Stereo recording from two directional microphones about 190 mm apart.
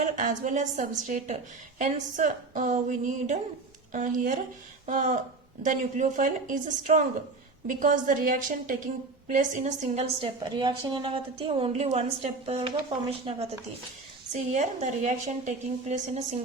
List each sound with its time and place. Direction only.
0.0 s a woman's voice: 40° right (ahead or behind)